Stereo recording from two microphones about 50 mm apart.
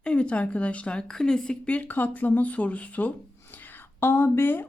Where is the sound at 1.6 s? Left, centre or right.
Left.